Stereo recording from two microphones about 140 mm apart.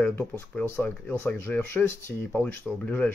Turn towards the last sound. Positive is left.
turn(degrees=10)  # may be behind; listen again after turning